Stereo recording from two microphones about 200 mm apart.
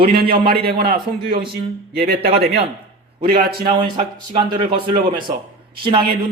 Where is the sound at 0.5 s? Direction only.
55° right (ahead or behind).